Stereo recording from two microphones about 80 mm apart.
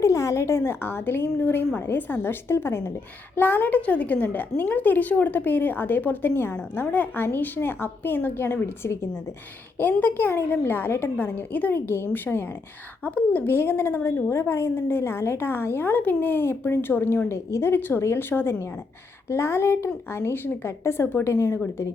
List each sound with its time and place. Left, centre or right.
0.0 s a woman's voice: left
9.7 s a woman's voice: left